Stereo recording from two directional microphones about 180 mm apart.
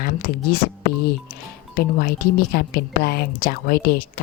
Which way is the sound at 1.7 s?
55° left (ahead or behind).